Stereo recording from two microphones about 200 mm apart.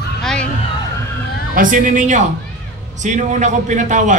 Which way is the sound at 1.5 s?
40° right (ahead or behind).